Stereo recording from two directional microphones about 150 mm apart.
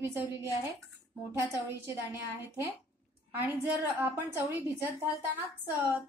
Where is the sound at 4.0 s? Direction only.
15° right (ahead or behind).